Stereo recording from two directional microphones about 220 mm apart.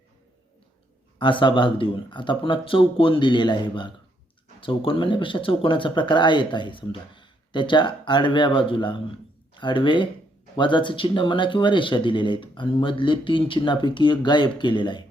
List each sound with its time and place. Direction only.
1.2 s speech: 20° left (ahead or behind)